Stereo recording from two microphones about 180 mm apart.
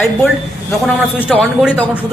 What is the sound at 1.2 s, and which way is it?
Speech, 5° right (ahead or behind).